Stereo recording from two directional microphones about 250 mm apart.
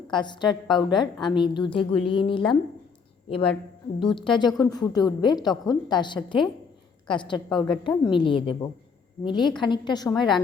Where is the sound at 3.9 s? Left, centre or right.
Centre.